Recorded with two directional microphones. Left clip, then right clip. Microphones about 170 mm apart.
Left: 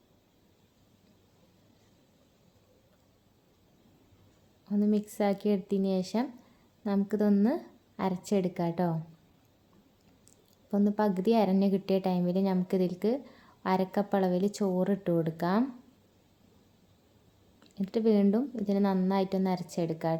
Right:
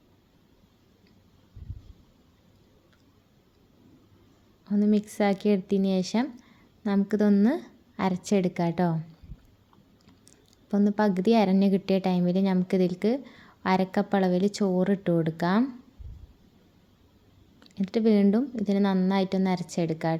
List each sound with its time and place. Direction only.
4.6 s a woman's voice: 20° right (ahead or behind)
10.7 s a woman's voice: 20° right (ahead or behind)
17.6 s a woman's voice: 20° right (ahead or behind)